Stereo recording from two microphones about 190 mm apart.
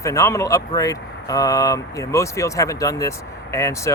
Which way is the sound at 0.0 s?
15° left (ahead or behind).